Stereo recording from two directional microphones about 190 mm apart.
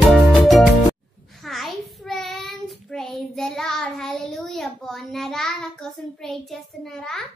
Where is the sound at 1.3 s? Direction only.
Centre (ahead or behind).